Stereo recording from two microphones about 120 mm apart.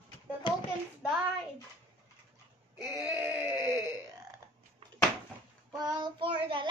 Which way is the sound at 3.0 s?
25° right (ahead or behind).